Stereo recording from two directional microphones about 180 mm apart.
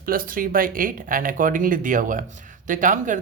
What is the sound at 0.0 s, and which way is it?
Speech, 50° right (ahead or behind).